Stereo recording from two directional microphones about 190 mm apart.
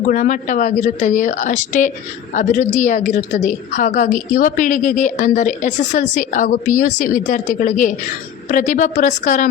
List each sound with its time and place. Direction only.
0.1 s a woman's voice: 40° left (ahead or behind)